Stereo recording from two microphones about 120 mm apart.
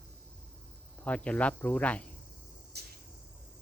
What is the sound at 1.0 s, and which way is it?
Cricket, 10° left (ahead or behind).